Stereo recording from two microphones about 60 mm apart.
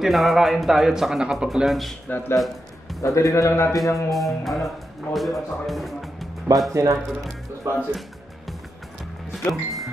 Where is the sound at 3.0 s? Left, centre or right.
Left.